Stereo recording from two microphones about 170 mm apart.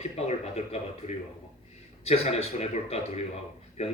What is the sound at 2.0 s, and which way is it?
Speech, 35° left (ahead or behind).